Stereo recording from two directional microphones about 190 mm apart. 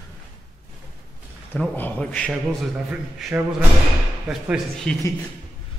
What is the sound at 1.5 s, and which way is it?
Speech, 5° left (ahead or behind).